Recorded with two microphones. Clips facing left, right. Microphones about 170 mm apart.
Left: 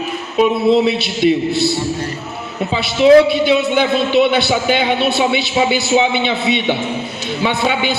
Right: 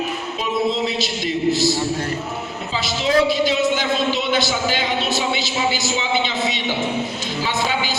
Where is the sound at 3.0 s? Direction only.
65° left (ahead or behind).